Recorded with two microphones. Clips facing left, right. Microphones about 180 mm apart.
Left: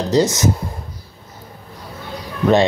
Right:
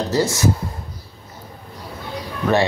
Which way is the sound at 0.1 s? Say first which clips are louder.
Left 5 dB; 20° left (ahead or behind).